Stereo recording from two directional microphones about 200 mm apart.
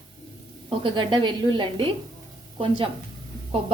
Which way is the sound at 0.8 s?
25° right (ahead or behind).